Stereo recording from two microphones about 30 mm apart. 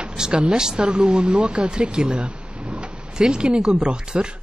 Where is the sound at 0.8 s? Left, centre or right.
Right.